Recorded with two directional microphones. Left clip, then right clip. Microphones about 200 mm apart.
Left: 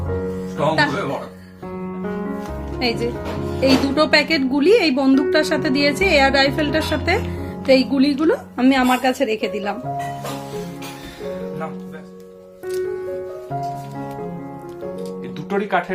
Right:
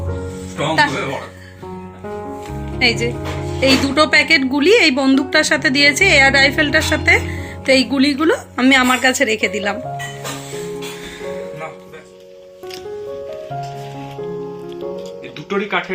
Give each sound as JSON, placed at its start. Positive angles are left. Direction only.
{"t": 2.7, "sound": "speech", "side_deg": 0}
{"t": 15.4, "sound": "music", "side_deg": 30}